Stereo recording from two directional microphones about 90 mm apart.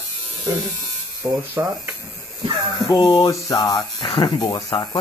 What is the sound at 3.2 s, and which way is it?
Speech, 45° left (ahead or behind).